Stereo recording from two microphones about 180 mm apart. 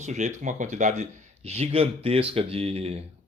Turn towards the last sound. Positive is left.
turn(degrees=-35)  # may be behind; listen again after turning